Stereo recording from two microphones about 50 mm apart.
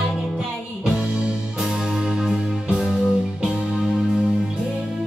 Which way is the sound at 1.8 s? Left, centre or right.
Centre.